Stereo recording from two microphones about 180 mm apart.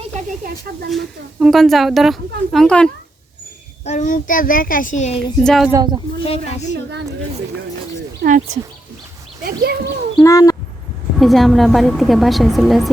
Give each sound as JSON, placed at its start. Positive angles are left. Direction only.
{"t": 0.4, "sound": "speech", "side_deg": -55}
{"t": 0.9, "sound": "speech", "side_deg": 0}
{"t": 3.8, "sound": "a child's voice", "side_deg": 45}
{"t": 5.4, "sound": "speech", "side_deg": 0}
{"t": 5.7, "sound": "speech", "side_deg": -20}
{"t": 6.1, "sound": "a woman's voice", "side_deg": 30}
{"t": 6.7, "sound": "speech", "side_deg": -65}
{"t": 8.2, "sound": "speech", "side_deg": -60}
{"t": 9.4, "sound": "speech", "side_deg": -60}
{"t": 10.2, "sound": "speech", "side_deg": 20}
{"t": 11.2, "sound": "speech", "side_deg": 0}